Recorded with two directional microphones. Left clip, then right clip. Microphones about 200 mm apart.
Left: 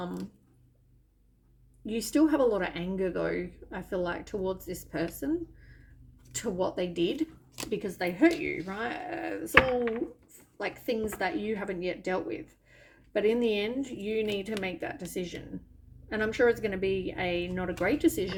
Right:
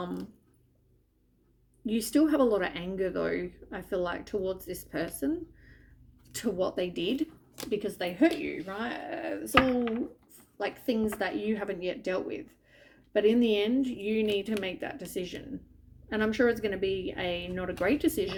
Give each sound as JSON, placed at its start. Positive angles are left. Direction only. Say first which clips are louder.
{"t": 0.0, "sound": "a sound", "louder": "right 1 dB", "side_deg": -15}
{"t": 1.9, "sound": "a woman's voice", "louder": "even", "side_deg": -25}
{"t": 10.6, "sound": "a woman's voice", "louder": "right 1 dB", "side_deg": -25}